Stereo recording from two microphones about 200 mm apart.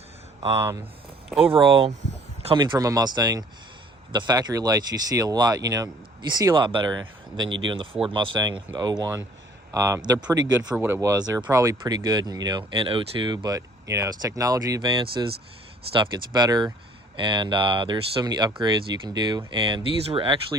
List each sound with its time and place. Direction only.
0.5 s speech: 15° right (ahead or behind)
1.5 s speech: 30° right (ahead or behind)